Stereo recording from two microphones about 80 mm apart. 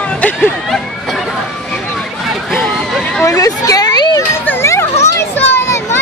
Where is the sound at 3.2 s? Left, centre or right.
Left.